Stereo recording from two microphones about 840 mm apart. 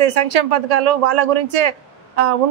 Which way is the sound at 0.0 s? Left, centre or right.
Right.